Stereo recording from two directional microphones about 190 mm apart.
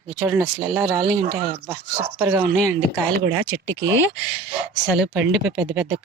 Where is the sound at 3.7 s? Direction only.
75° right (ahead or behind).